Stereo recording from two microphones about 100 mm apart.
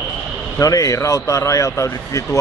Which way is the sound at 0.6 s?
35° left (ahead or behind).